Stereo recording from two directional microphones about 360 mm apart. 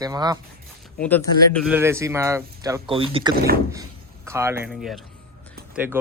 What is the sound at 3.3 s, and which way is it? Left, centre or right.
Speech, right.